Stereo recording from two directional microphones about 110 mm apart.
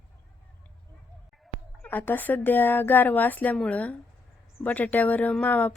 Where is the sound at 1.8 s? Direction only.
15° left (ahead or behind).